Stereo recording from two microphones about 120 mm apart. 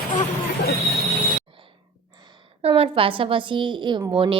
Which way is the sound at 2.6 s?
50° right (ahead or behind).